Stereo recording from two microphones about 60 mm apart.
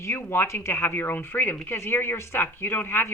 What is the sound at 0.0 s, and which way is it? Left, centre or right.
A woman's voice, left.